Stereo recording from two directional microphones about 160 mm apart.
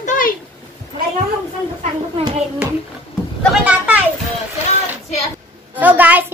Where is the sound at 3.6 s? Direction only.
10° right (ahead or behind).